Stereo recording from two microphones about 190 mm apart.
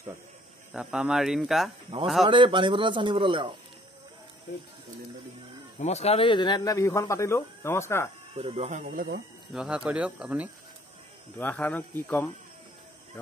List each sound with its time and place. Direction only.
0.7 s speech: 5° right (ahead or behind)
1.9 s a man's voice: 25° right (ahead or behind)
5.8 s speech: 35° left (ahead or behind); by 8.1 s 15° left (ahead or behind)
8.4 s speech: 30° right (ahead or behind); by 9.2 s 50° right (ahead or behind)
9.5 s speech: centre (ahead or behind)
11.3 s speech: 10° left (ahead or behind)